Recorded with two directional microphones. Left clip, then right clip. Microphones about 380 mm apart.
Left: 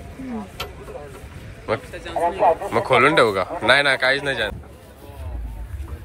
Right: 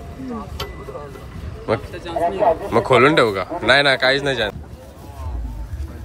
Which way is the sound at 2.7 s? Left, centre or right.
Centre.